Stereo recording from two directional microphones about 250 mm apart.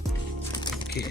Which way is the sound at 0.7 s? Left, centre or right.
Centre.